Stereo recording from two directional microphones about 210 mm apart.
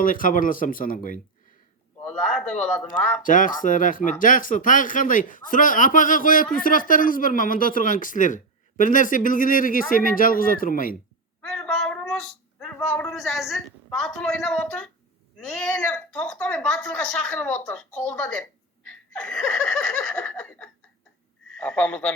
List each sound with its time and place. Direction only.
0.0 s speech: 40° left (ahead or behind)
2.0 s a man's voice: 5° left (ahead or behind)
3.2 s speech: 40° left (ahead or behind)
11.4 s a sound: 5° left (ahead or behind)
15.4 s speech: 5° left (ahead or behind)
18.9 s laughter: 5° left (ahead or behind)
21.6 s a man's voice: 5° left (ahead or behind)